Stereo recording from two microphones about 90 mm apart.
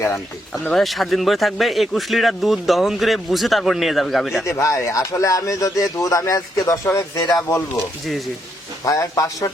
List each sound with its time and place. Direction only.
0.7 s speech: centre (ahead or behind)
4.4 s speech: 35° left (ahead or behind)
8.8 s speech: 40° left (ahead or behind)